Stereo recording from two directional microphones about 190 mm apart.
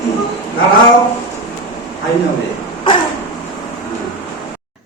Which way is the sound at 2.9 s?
25° left (ahead or behind).